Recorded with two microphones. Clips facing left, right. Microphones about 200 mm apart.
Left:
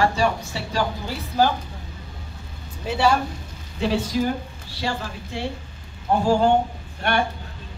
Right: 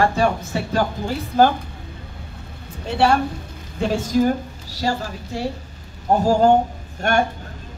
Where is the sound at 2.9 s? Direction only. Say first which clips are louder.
Right 2 dB; 60° right (ahead or behind).